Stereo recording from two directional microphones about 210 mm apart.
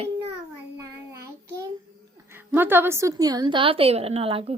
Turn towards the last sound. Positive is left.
turn(degrees=-25)  # may be behind; listen again after turning